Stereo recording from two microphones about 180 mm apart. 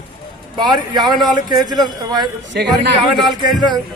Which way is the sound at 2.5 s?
65° right (ahead or behind).